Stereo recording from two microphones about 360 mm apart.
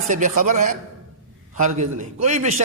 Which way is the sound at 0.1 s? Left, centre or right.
Right.